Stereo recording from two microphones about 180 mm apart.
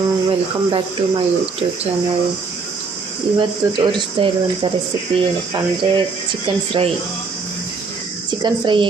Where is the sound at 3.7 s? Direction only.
25° right (ahead or behind).